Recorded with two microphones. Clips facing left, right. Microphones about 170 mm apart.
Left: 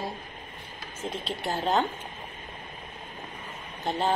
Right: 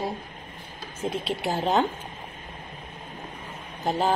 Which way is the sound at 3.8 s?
Centre (ahead or behind).